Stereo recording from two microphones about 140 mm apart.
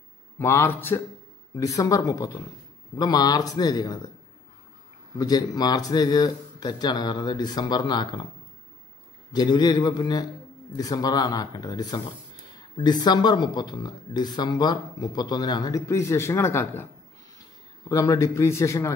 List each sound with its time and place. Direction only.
0.4 s a man's voice: 15° left (ahead or behind)
5.1 s speech: 25° left (ahead or behind)
9.3 s a man's voice: 30° left (ahead or behind)